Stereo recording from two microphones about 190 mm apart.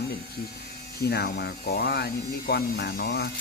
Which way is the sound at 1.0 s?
60° left (ahead or behind).